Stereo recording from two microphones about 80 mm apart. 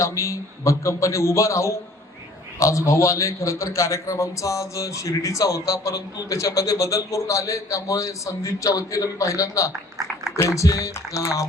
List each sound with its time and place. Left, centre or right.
0.0 s a man's voice: left